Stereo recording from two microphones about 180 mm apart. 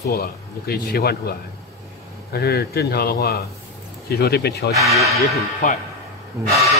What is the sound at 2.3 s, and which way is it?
Speech, 60° left (ahead or behind).